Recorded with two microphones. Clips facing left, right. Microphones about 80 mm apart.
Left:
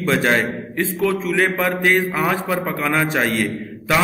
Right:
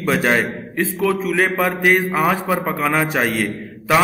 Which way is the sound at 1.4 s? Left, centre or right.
Centre.